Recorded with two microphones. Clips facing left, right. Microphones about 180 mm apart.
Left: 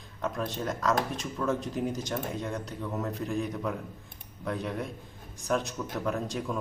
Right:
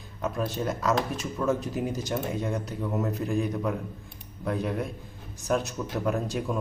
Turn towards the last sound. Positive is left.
turn(degrees=-5)  # may be behind; listen again after turning